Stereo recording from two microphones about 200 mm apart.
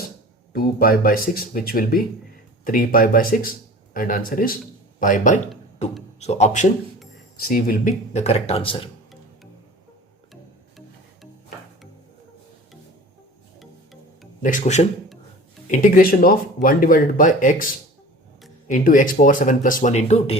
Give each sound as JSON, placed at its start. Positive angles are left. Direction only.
{"t": 0.5, "sound": "speech", "side_deg": 50}
{"t": 7.3, "sound": "speech", "side_deg": 50}
{"t": 13.6, "sound": "music", "side_deg": 0}
{"t": 14.4, "sound": "speech", "side_deg": 35}
{"t": 18.7, "sound": "speech", "side_deg": 40}